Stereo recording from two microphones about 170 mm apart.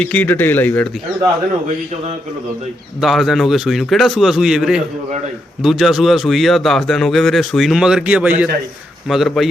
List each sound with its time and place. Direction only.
0.0 s speech: 10° left (ahead or behind)
3.0 s a man's voice: centre (ahead or behind)